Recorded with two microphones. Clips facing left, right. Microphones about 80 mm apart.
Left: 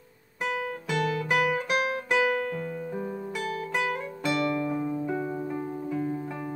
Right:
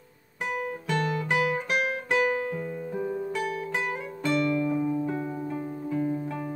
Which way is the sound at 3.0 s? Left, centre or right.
Centre.